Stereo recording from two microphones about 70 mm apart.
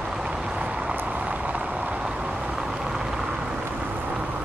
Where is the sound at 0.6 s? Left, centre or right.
Centre.